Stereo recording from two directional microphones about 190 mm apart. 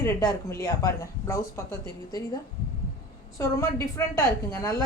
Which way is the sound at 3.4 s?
15° left (ahead or behind).